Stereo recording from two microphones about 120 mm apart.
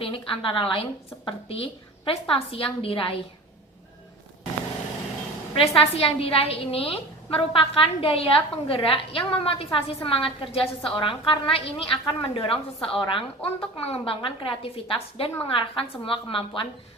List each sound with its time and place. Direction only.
0.0 s a woman's voice: 50° left (ahead or behind)
5.5 s a woman's voice: 50° left (ahead or behind)